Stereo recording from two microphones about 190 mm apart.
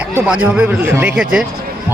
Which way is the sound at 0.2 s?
5° right (ahead or behind).